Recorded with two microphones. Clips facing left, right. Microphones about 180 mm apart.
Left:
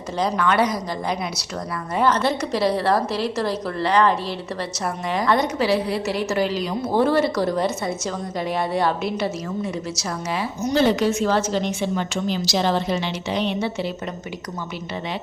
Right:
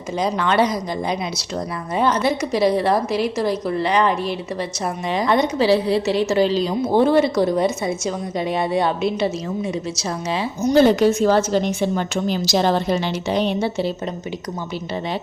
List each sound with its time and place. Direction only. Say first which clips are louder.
0.3 s a woman's voice: right 2 dB; 25° right (ahead or behind)
2.0 s a woman's voice: right 1 dB; 15° right (ahead or behind)
10.8 s a woman's voice: right 5 dB; 45° right (ahead or behind)